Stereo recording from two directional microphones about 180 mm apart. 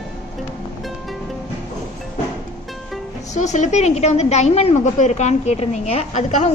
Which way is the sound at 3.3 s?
40° left (ahead or behind).